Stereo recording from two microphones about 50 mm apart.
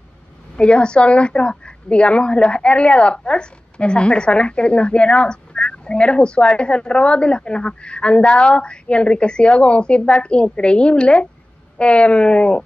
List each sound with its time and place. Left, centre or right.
0.6 s a woman's voice: left